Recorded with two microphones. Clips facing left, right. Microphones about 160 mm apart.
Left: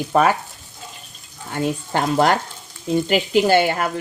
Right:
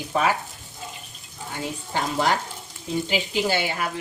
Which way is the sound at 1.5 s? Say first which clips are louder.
Left 7 dB; 60° left (ahead or behind).